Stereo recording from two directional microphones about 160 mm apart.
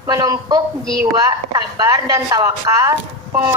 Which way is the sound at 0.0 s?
20° right (ahead or behind).